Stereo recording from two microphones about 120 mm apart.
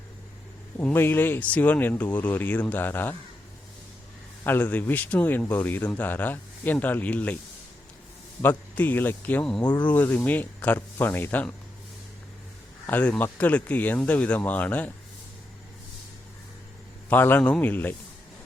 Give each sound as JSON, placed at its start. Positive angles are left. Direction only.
{"t": 0.8, "sound": "a man's voice", "side_deg": 15}
{"t": 4.4, "sound": "a man's voice", "side_deg": 15}
{"t": 8.4, "sound": "a man's voice", "side_deg": 15}
{"t": 12.9, "sound": "a man's voice", "side_deg": 15}
{"t": 17.1, "sound": "a man's voice", "side_deg": 15}